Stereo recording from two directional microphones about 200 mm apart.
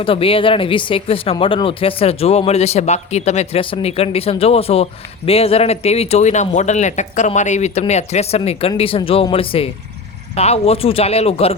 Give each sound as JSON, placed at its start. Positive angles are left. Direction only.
{"t": 0.0, "sound": "speech", "side_deg": 25}